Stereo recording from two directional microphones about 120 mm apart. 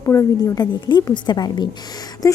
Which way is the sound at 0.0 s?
25° left (ahead or behind).